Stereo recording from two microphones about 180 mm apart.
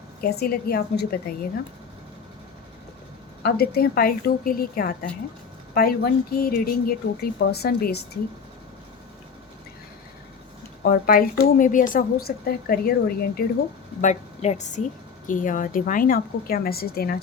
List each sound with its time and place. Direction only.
0.2 s a woman's voice: 60° left (ahead or behind)
3.4 s a woman's voice: 60° left (ahead or behind)
10.8 s speech: 50° left (ahead or behind)
14.0 s a woman's voice: 40° left (ahead or behind); by 17.2 s 55° left (ahead or behind)